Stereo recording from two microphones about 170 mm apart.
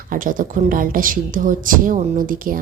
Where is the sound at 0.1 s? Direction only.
55° right (ahead or behind).